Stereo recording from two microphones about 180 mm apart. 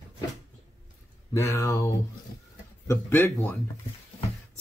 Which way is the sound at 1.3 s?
15° left (ahead or behind).